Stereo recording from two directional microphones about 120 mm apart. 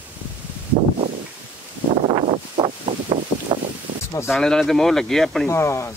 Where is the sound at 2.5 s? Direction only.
45° right (ahead or behind).